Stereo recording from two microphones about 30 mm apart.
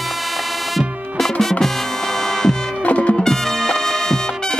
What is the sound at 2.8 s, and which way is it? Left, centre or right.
Music, left.